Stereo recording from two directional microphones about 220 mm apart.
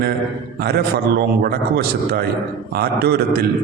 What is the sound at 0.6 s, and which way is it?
A man's voice, 45° right (ahead or behind).